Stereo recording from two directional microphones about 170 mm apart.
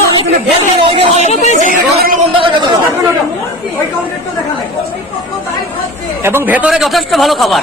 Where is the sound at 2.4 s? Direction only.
25° right (ahead or behind).